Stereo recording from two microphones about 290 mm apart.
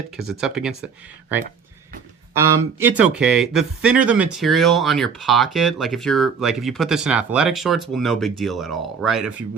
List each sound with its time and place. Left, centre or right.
0.2 s speech: centre